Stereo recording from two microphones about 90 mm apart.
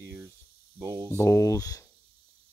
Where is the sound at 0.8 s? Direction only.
35° right (ahead or behind).